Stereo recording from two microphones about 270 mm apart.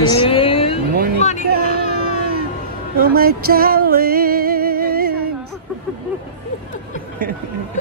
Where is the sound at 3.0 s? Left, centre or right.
Right.